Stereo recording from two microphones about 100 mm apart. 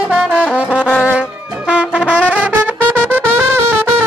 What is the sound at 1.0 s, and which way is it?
Brass instrument, 10° right (ahead or behind).